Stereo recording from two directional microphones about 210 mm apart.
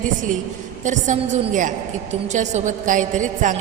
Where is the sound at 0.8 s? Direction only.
35° right (ahead or behind).